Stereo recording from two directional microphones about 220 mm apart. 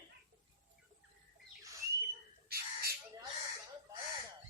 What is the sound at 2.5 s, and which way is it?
Bird, 45° right (ahead or behind).